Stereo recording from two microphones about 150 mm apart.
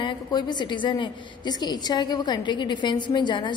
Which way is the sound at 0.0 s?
30° left (ahead or behind).